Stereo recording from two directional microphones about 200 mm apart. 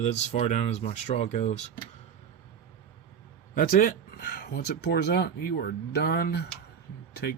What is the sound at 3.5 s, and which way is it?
Speech, 45° left (ahead or behind).